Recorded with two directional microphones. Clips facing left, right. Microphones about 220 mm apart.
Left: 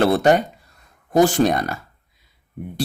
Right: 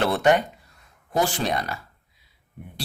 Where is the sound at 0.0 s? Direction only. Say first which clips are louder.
Left 4 dB; 35° left (ahead or behind).